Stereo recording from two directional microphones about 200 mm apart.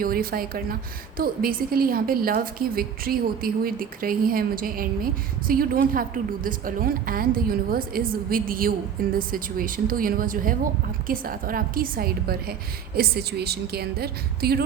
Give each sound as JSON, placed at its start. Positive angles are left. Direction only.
{"t": 0.0, "sound": "a woman's voice", "side_deg": -45}